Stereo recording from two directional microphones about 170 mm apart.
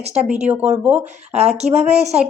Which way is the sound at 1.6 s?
40° right (ahead or behind).